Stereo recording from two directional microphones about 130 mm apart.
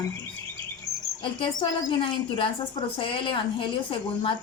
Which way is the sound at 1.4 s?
40° left (ahead or behind).